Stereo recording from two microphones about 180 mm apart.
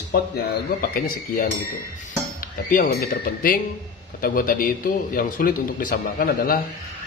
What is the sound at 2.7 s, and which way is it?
A man's voice, 50° left (ahead or behind).